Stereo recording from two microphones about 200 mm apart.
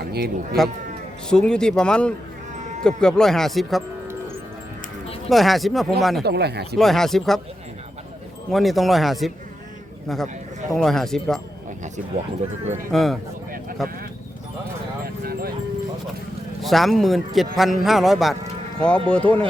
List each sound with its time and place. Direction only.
0.0 s livestock: 50° right (ahead or behind)
1.3 s a man's voice: 5° left (ahead or behind)
5.3 s a man's voice: centre (ahead or behind)
6.2 s speech: 55° right (ahead or behind)
6.7 s a man's voice: centre (ahead or behind)
8.4 s a man's voice: centre (ahead or behind)
12.9 s a man's voice: centre (ahead or behind)
15.0 s horse: 50° right (ahead or behind)
16.6 s a man's voice: centre (ahead or behind)